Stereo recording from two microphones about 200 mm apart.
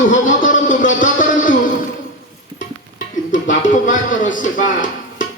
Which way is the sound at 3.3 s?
40° left (ahead or behind).